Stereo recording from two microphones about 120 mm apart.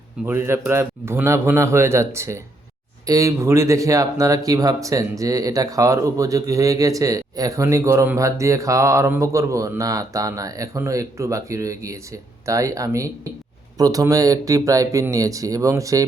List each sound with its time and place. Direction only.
0.3 s speech: 20° right (ahead or behind)